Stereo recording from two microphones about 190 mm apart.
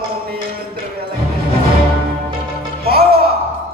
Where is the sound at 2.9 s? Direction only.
55° right (ahead or behind).